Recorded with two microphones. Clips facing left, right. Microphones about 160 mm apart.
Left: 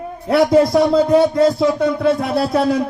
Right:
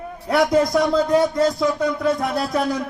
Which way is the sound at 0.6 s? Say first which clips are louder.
Left 5 dB; 30° left (ahead or behind).